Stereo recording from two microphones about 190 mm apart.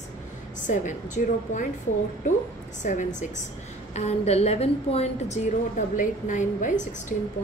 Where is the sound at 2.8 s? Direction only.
40° left (ahead or behind).